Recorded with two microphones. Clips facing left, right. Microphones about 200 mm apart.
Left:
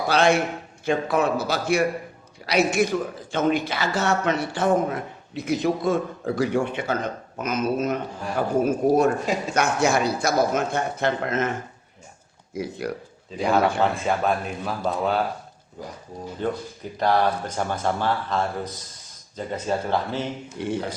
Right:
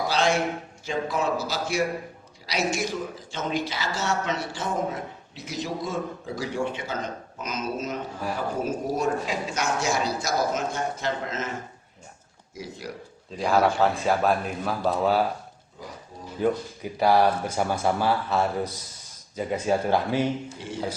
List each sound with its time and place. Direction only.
0.1 s a woman's voice: 60° left (ahead or behind)
12.5 s a woman's voice: 60° left (ahead or behind)
13.3 s a man's voice: centre (ahead or behind)
16.4 s speech: 10° right (ahead or behind)
20.6 s a woman's voice: 60° left (ahead or behind)